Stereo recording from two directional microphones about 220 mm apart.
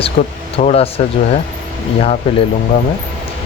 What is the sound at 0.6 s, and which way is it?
Speech, 25° left (ahead or behind).